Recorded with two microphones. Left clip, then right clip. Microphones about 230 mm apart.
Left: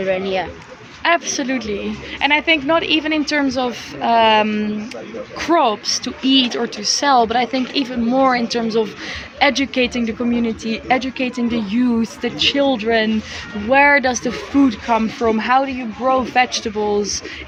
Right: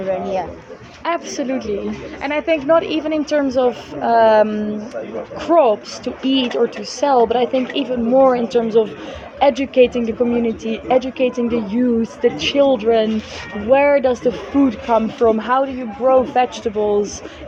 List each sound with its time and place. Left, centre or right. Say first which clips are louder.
0.1 s speech: even; centre
1.0 s a woman's voice: left 4 dB; left
5.5 s a woman's voice: right 2 dB; left